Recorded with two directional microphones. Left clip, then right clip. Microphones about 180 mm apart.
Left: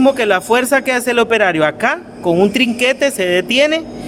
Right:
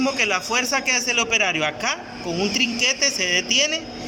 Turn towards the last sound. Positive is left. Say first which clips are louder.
# left 7 dB
turn(degrees=70)  # may be behind; listen again after turning